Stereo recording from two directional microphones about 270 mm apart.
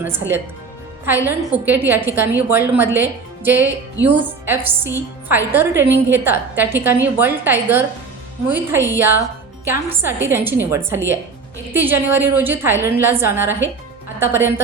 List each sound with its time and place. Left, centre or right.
0.0 s a woman's voice: centre